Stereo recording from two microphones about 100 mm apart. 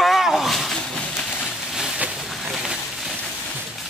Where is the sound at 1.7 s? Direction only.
5° right (ahead or behind).